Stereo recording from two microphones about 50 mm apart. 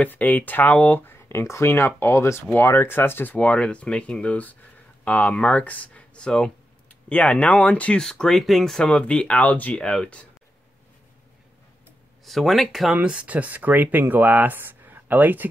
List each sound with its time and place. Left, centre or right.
0.0 s speech: left
1.3 s speech: left
2.7 s speech: left
3.3 s speech: left
6.1 s speech: centre
7.1 s speech: left
8.0 s speech: centre
8.7 s speech: centre; by 9.8 s left
9.8 s speech: centre
12.3 s speech: centre
13.0 s speech: right